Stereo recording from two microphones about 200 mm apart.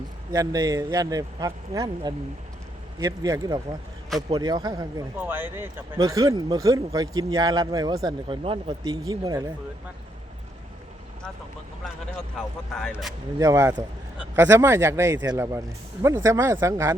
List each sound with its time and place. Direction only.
0.3 s a man's voice: 15° right (ahead or behind)
12.4 s speech: 5° left (ahead or behind)
13.4 s speech: 15° right (ahead or behind)